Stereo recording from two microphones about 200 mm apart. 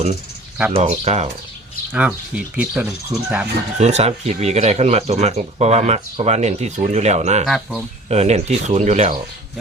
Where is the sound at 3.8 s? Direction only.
35° right (ahead or behind).